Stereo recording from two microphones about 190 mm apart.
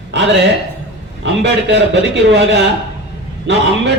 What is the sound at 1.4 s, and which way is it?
A man's voice, 70° right (ahead or behind).